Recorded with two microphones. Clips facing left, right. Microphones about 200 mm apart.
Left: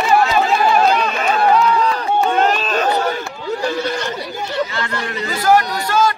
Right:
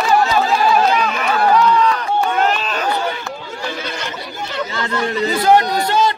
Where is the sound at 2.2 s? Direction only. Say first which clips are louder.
Left 5 dB; 25° left (ahead or behind).